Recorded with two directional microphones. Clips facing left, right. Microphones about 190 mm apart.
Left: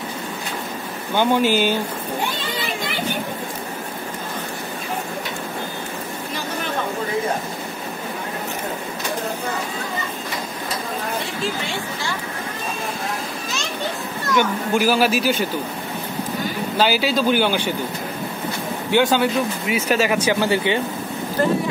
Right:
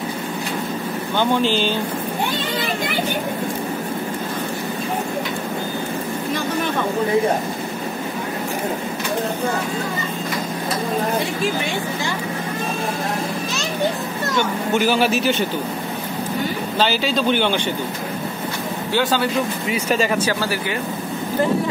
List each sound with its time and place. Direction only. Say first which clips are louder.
1.1 s speech: left 2 dB; 10° left (ahead or behind)
14.7 s a man's voice: right 1 dB; 5° left (ahead or behind)
16.7 s speech: left 2 dB; 10° left (ahead or behind)
18.9 s speech: left 3 dB; 15° left (ahead or behind)
19.7 s a man's voice: left 1 dB; 5° left (ahead or behind)
20.2 s speech: left 4 dB; 20° left (ahead or behind)